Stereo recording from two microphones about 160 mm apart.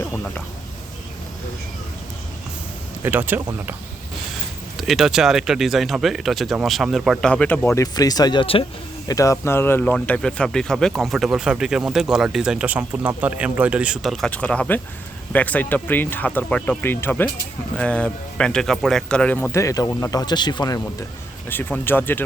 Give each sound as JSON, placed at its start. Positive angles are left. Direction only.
{"t": 3.0, "sound": "speech", "side_deg": -10}
{"t": 4.8, "sound": "speech", "side_deg": 0}
{"t": 7.8, "sound": "speech", "side_deg": 25}
{"t": 9.0, "sound": "speech", "side_deg": 20}
{"t": 21.5, "sound": "speech", "side_deg": 10}